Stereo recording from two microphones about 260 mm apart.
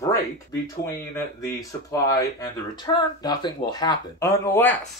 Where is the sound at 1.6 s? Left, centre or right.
Centre.